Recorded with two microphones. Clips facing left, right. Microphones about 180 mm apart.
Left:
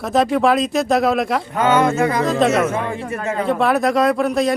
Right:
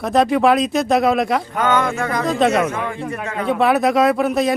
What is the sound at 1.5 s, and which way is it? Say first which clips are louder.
Speech: left 6 dB; 20° left (ahead or behind).